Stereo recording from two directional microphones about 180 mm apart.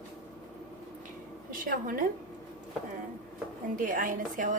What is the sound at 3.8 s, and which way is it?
Speech, 45° right (ahead or behind).